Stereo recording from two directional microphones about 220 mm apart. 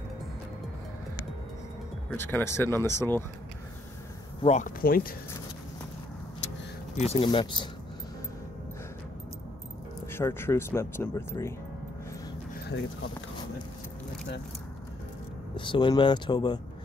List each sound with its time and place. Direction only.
2.0 s speech: 10° left (ahead or behind)
4.4 s speech: 30° left (ahead or behind)
7.0 s speech: 25° left (ahead or behind)
10.1 s speech: 10° left (ahead or behind)
12.5 s a sound: 50° left (ahead or behind)
15.5 s speech: 20° left (ahead or behind)